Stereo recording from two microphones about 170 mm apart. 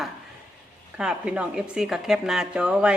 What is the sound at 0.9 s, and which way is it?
A woman's voice, 5° right (ahead or behind).